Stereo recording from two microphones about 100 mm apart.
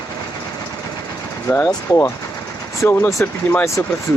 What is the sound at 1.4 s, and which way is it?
Speech, 25° left (ahead or behind).